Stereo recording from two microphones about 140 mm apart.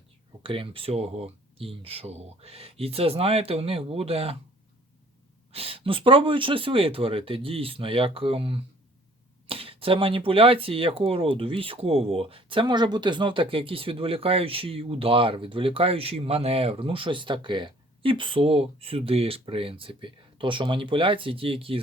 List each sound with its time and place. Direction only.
0.4 s speech: 40° right (ahead or behind)
5.5 s speech: 45° right (ahead or behind)